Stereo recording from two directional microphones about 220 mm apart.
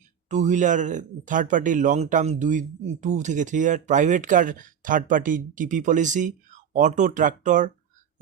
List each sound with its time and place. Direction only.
0.3 s speech: 35° right (ahead or behind)